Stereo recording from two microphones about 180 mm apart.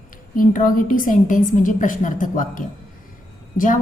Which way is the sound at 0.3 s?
50° left (ahead or behind).